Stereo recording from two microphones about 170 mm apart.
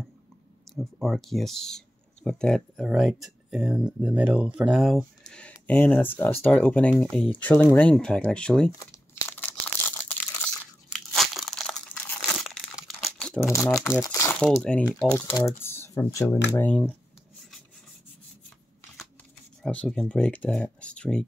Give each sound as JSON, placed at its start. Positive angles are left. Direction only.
{"t": 0.7, "sound": "speech", "side_deg": 0}
{"t": 8.7, "sound": "crumpling", "side_deg": 15}
{"t": 12.4, "sound": "tearing", "side_deg": 0}
{"t": 12.8, "sound": "crumpling", "side_deg": 5}
{"t": 13.5, "sound": "speech", "side_deg": 15}
{"t": 14.4, "sound": "speech", "side_deg": 5}
{"t": 15.1, "sound": "speech", "side_deg": 20}
{"t": 19.6, "sound": "speech", "side_deg": 5}